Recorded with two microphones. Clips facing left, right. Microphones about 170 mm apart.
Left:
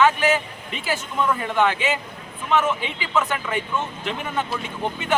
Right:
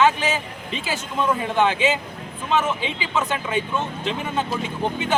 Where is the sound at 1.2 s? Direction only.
20° right (ahead or behind).